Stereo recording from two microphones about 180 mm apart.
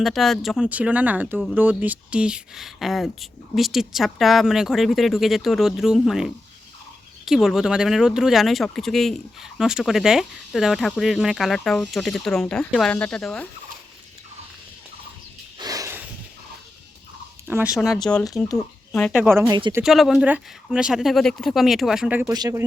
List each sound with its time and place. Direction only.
0.0 s speech: centre (ahead or behind)
15.5 s a sound: 20° right (ahead or behind)
17.5 s speech: 5° right (ahead or behind)
17.9 s speech: 5° left (ahead or behind)
19.1 s speech: 10° right (ahead or behind)
19.8 s speech: centre (ahead or behind)
22.3 s speech: 20° right (ahead or behind)